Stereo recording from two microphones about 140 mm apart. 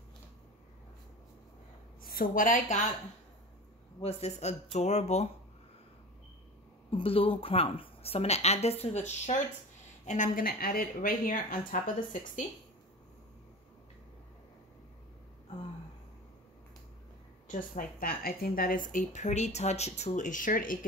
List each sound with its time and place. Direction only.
2.0 s a woman's voice: 80° left
4.0 s speech: 50° left (ahead or behind)
6.9 s speech: 40° left (ahead or behind); by 12.4 s 65° left (ahead or behind)
17.5 s a woman's voice: 75° left (ahead or behind)
18.9 s speech: 60° left (ahead or behind)